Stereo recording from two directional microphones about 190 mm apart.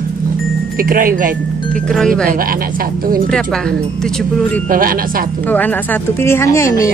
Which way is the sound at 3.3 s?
5° left (ahead or behind).